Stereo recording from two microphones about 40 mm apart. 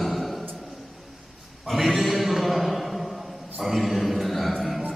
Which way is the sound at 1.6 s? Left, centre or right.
Centre.